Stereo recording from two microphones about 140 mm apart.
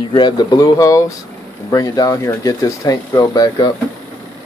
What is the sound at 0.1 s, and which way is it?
Speech, 30° left (ahead or behind).